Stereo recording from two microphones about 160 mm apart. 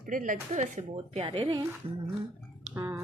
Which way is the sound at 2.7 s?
15° right (ahead or behind).